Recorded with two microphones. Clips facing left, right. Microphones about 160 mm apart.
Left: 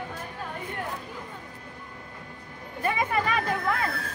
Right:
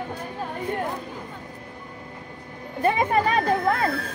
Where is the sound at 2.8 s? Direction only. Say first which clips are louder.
Right 6 dB; 35° right (ahead or behind).